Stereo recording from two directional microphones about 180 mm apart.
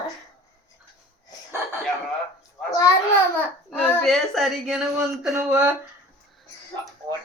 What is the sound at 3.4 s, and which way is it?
Speech, 10° left (ahead or behind).